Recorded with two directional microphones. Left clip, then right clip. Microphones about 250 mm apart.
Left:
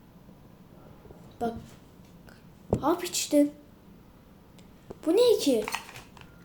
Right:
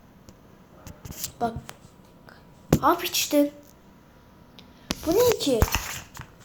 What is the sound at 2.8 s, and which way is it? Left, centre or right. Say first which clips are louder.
Speech: right 6 dB; centre.